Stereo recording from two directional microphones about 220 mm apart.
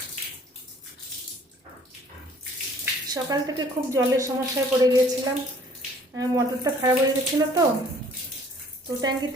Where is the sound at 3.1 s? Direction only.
15° right (ahead or behind).